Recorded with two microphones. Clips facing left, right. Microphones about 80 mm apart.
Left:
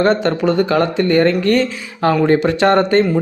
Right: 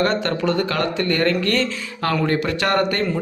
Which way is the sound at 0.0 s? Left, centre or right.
Left.